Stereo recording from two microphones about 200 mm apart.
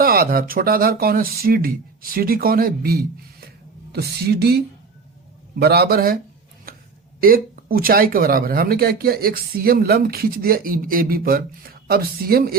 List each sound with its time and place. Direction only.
0.0 s a woman's voice: 45° right (ahead or behind)
7.2 s a woman's voice: 45° right (ahead or behind)